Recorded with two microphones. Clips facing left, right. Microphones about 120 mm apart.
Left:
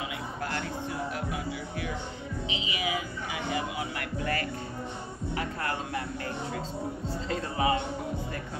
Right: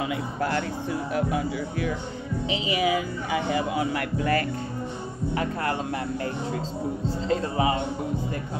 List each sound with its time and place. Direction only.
2.5 s speech: 40° right (ahead or behind)
5.3 s speech: 30° right (ahead or behind)
7.1 s speech: 25° right (ahead or behind)